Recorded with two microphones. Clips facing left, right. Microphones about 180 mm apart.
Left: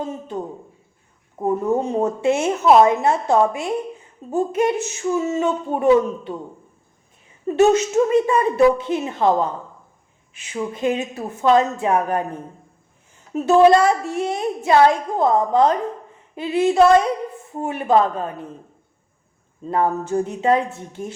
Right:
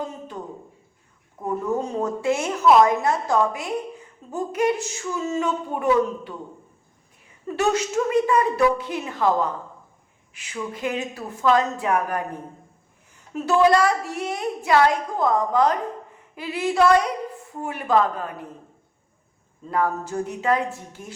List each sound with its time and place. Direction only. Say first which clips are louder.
0.0 s a woman's voice: left 5 dB; 25° left (ahead or behind)
7.4 s a woman's voice: left 7 dB; 25° left (ahead or behind)
13.3 s a woman's voice: left 5 dB; 25° left (ahead or behind)
19.6 s a woman's voice: left 4 dB; 25° left (ahead or behind)